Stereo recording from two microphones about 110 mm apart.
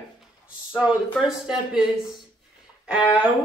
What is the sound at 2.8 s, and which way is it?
Speech, 10° right (ahead or behind).